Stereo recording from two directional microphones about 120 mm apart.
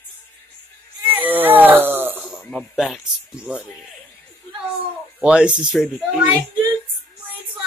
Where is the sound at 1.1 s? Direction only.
15° right (ahead or behind).